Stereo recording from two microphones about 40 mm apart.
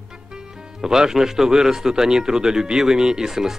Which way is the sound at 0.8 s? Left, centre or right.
Centre.